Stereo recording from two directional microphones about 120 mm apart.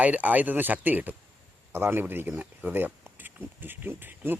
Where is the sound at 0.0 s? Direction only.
15° right (ahead or behind).